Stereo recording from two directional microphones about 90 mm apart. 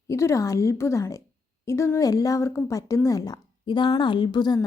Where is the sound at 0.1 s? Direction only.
30° left (ahead or behind).